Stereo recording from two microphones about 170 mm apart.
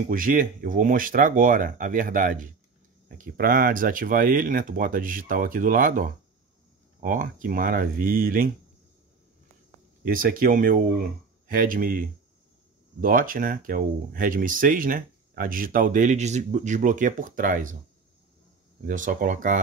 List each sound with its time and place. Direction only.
0.1 s speech: 55° right (ahead or behind)
10.0 s speech: 55° right (ahead or behind)
18.9 s speech: 50° right (ahead or behind)